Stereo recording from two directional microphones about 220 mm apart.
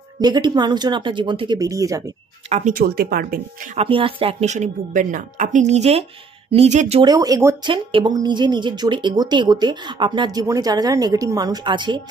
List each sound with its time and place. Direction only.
0.2 s speech: 20° right (ahead or behind)
2.5 s speech: 35° right (ahead or behind)
3.7 s speech: 25° right (ahead or behind)
7.1 s speech: 15° right (ahead or behind)